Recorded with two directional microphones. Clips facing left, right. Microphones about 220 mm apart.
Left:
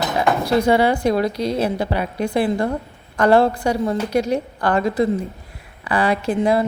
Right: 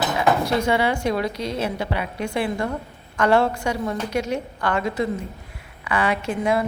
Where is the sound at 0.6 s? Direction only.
35° left (ahead or behind).